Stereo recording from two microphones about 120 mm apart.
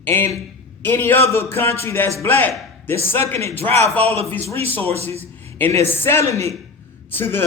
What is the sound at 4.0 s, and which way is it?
Speech, 55° right (ahead or behind).